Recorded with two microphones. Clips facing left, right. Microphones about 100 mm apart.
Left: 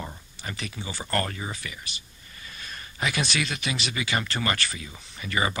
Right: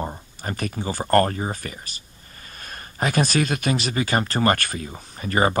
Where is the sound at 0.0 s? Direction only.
45° right (ahead or behind).